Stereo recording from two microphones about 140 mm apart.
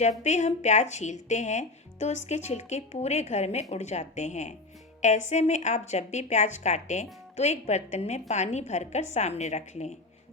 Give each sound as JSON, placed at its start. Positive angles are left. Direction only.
{"t": 0.0, "sound": "speech", "side_deg": 55}